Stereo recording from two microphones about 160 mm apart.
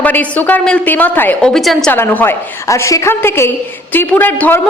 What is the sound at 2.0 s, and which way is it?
A woman's voice, 15° left (ahead or behind).